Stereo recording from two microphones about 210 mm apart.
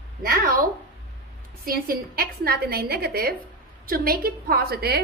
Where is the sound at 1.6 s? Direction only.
45° right (ahead or behind).